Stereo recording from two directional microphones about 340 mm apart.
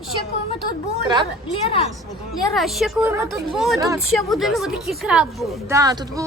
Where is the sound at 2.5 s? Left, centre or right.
Centre.